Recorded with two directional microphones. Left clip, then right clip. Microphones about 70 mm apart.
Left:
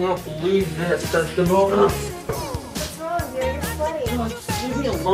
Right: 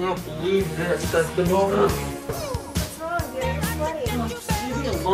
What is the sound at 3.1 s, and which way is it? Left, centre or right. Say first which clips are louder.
Music: left 3 dB; centre.